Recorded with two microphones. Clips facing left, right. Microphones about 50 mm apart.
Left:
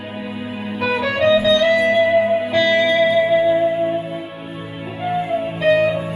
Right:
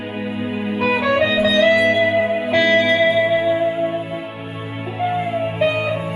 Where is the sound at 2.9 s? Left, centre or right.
Centre.